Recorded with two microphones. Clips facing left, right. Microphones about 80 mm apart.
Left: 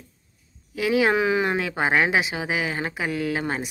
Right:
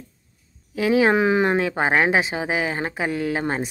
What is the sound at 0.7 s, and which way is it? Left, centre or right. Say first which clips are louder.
A woman's voice: right 3 dB; right.